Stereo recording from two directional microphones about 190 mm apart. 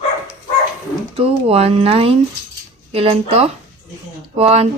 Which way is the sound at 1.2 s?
30° right (ahead or behind).